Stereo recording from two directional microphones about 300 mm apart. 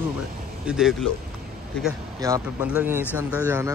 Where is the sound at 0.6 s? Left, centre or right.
Centre.